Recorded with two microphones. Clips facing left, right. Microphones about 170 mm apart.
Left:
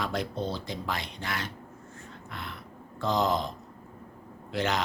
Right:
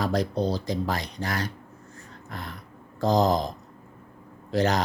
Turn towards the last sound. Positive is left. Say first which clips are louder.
# right 6 dB
turn(degrees=-40)  # may be behind; listen again after turning